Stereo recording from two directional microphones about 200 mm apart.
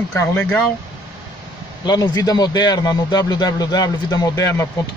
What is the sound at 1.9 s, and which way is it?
A man's voice, 20° left (ahead or behind).